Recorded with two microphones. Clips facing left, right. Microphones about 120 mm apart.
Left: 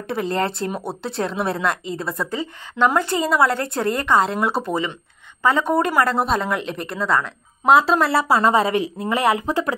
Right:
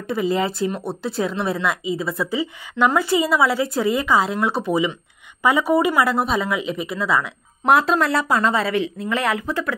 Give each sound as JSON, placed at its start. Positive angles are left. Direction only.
{"t": 0.1, "sound": "a woman's voice", "side_deg": 0}
{"t": 5.4, "sound": "a woman's voice", "side_deg": -10}